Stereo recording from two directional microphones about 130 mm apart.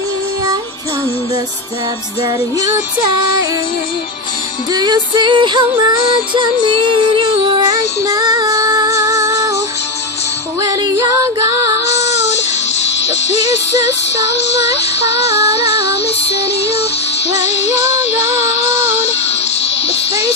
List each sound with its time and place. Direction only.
4.7 s music: 35° right (ahead or behind)
11.9 s child singing: 60° left (ahead or behind)
13.1 s music: 60° left (ahead or behind)
17.3 s music: 60° left (ahead or behind)